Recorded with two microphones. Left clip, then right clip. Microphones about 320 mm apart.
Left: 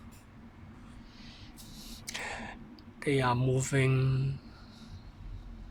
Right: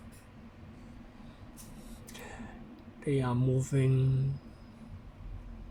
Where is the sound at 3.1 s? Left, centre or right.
Left.